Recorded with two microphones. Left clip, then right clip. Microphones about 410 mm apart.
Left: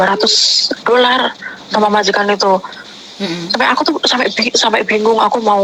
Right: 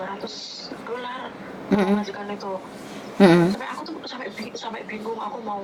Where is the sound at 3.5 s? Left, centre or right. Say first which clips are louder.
Left 19 dB; left.